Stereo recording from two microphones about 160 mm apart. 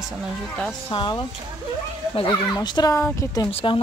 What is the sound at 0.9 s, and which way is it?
Speech, 30° left (ahead or behind).